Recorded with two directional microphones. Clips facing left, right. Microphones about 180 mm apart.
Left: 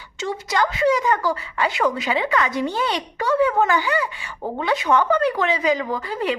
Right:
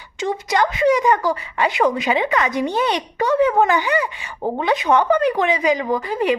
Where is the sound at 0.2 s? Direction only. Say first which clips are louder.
Right 3 dB; 20° right (ahead or behind).